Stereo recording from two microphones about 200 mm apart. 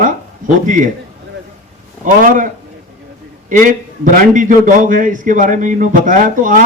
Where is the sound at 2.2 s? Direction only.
40° right (ahead or behind).